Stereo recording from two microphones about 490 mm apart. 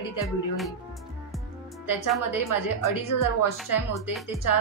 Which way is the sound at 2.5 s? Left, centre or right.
Left.